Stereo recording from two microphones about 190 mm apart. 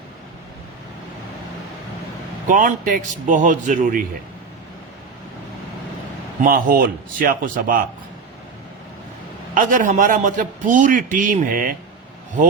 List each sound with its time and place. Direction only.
2.5 s a man's voice: 45° right (ahead or behind)
6.4 s a man's voice: 50° right (ahead or behind)
9.6 s a man's voice: 45° right (ahead or behind)